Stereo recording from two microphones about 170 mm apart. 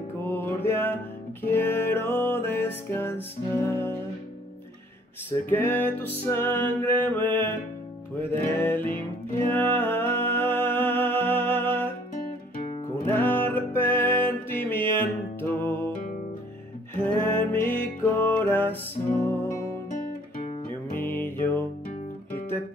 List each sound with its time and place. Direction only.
0.2 s music: 10° left (ahead or behind)
5.5 s music: 10° left (ahead or behind)
13.0 s music: 10° left (ahead or behind)
17.0 s music: 10° left (ahead or behind)
19.9 s guitar: 50° left (ahead or behind)
21.0 s music: 10° left (ahead or behind)